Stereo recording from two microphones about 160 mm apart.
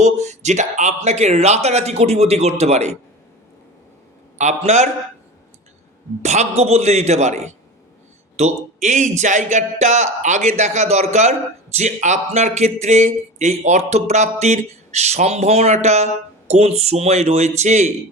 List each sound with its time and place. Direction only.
0.0 s speech: 45° right (ahead or behind)
4.4 s speech: 45° right (ahead or behind)
6.2 s speech: 45° right (ahead or behind)